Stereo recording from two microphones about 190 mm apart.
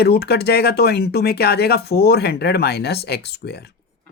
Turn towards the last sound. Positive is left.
turn(degrees=60)  # may be behind; listen again after turning